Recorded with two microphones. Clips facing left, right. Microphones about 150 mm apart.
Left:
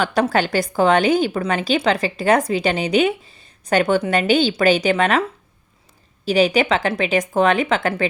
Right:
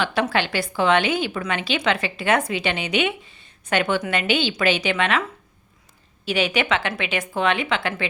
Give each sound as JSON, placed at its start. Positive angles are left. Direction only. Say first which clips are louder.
{"t": 0.0, "sound": "a woman's voice", "louder": "left 4 dB", "side_deg": 40}
{"t": 6.2, "sound": "a woman's voice", "louder": "left 6 dB", "side_deg": 40}